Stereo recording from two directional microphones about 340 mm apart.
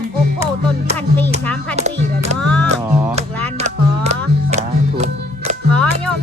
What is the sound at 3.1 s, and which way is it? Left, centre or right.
Music, centre.